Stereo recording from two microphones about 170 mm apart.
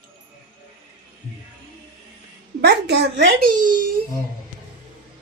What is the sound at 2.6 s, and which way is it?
Speech, 80° right.